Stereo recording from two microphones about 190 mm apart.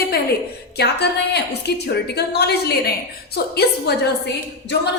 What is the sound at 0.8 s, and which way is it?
A woman's voice, 60° left (ahead or behind).